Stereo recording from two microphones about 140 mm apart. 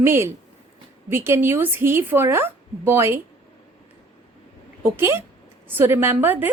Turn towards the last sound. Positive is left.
turn(degrees=-15)  # may be behind; listen again after turning